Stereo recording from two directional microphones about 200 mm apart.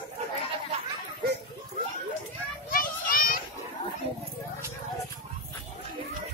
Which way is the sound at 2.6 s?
45° left (ahead or behind).